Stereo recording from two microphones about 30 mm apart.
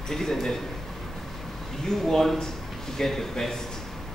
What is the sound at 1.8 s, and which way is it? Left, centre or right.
A man's voice, centre.